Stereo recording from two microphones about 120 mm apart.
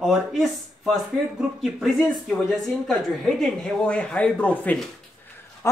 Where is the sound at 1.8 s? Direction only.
Centre (ahead or behind).